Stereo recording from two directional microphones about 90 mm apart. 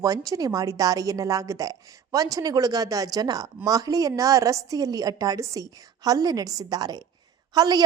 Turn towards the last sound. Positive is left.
turn(degrees=-45)  # may be behind; listen again after turning